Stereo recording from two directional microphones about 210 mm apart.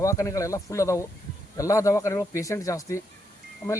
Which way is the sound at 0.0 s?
15° left (ahead or behind).